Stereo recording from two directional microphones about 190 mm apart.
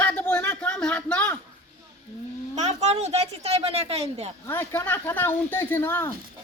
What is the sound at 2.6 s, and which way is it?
A child's voice, 35° right (ahead or behind).